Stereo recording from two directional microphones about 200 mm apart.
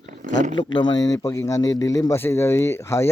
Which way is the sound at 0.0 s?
40° right (ahead or behind).